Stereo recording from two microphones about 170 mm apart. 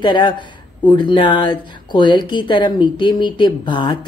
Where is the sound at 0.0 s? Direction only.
30° left (ahead or behind).